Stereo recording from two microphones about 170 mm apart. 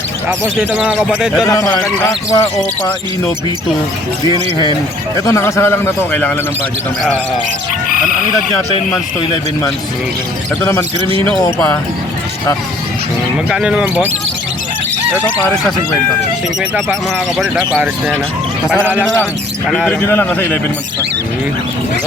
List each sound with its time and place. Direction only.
0.3 s speech: 5° right (ahead or behind)
1.5 s speech: 20° left (ahead or behind)
5.2 s a man's voice: 15° left (ahead or behind)
11.3 s a man's voice: 10° left (ahead or behind)
13.5 s speech: 5° right (ahead or behind)
17.3 s speech: 5° right (ahead or behind)
19.7 s a man's voice: 5° left (ahead or behind)